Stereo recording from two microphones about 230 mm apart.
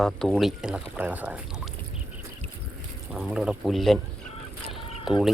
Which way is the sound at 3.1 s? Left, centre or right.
Centre.